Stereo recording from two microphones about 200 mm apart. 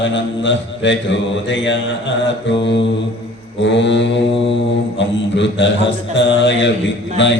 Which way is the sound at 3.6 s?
65° left (ahead or behind).